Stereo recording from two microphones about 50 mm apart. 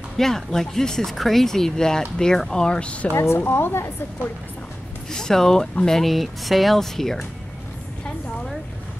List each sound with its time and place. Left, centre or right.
0.2 s speech: centre; by 3.1 s left
3.1 s a woman's voice: left
5.1 s speech: centre